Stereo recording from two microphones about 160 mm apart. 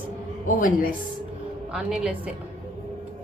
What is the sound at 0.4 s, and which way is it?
Speech, 60° left (ahead or behind).